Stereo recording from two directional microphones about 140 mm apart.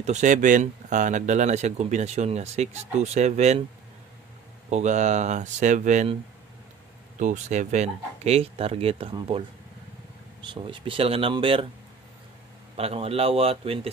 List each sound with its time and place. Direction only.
0.0 s speech: 60° right (ahead or behind)
4.6 s speech: 55° right (ahead or behind)
7.2 s speech: 60° right (ahead or behind); by 9.4 s 40° right (ahead or behind)
10.4 s speech: 35° right (ahead or behind)
12.7 s speech: 45° right (ahead or behind)